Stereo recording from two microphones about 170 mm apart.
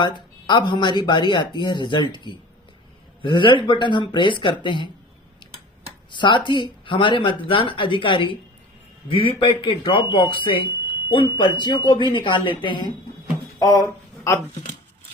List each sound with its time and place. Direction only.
0.0 s speech: 25° left (ahead or behind)
6.1 s speech: 25° left (ahead or behind)
13.6 s a sound: 20° left (ahead or behind)